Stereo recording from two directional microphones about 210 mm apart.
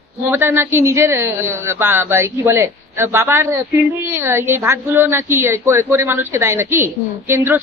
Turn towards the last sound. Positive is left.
turn(degrees=-10)  # may be behind; listen again after turning